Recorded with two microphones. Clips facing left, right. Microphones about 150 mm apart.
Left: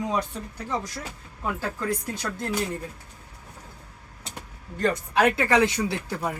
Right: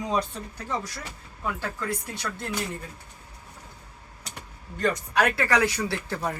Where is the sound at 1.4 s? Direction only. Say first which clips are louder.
Left 2 dB; 35° left (ahead or behind).